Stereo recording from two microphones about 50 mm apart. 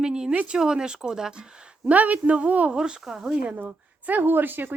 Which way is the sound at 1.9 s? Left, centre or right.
Right.